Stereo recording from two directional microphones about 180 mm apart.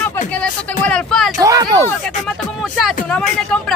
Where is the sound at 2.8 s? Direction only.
5° left (ahead or behind).